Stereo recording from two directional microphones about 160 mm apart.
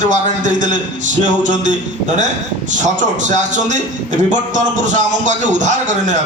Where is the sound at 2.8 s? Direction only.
50° right (ahead or behind).